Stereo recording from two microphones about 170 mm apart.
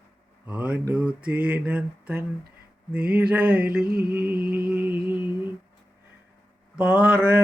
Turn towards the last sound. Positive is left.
turn(degrees=-10)  # may be behind; listen again after turning